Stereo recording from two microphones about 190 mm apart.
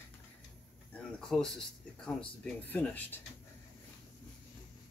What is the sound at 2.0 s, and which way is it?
Speech, 5° left (ahead or behind).